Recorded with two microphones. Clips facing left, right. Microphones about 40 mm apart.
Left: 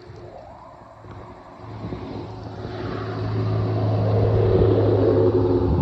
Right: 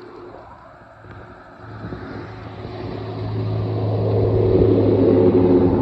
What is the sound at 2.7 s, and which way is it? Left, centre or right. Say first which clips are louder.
Vehicle: left 1 dB; centre.